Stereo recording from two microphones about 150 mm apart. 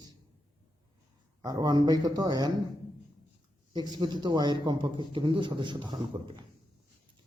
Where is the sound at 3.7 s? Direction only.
30° right (ahead or behind).